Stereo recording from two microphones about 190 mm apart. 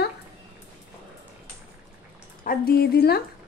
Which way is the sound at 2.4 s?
50° left (ahead or behind).